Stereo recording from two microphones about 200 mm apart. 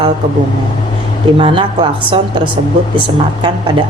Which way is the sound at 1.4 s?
25° right (ahead or behind).